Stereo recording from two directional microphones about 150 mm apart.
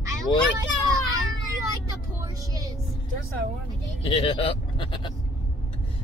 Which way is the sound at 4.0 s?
35° left (ahead or behind).